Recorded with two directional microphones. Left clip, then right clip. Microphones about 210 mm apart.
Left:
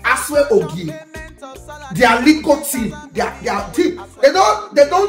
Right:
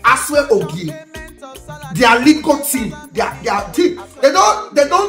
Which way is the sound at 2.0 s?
15° right (ahead or behind).